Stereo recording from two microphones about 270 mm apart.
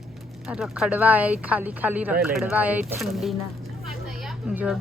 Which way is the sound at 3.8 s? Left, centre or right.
Centre.